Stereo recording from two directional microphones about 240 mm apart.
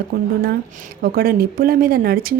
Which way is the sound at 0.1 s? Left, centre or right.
Right.